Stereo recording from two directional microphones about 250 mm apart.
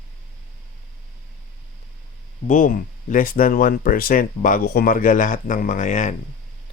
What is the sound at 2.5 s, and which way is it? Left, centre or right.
Speech, left.